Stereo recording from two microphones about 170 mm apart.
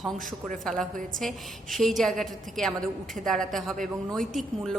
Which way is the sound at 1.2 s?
Centre (ahead or behind).